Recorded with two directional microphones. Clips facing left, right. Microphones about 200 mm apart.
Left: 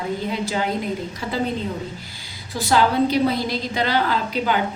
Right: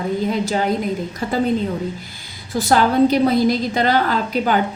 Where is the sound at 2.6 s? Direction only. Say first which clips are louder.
Right 4 dB; 45° right (ahead or behind).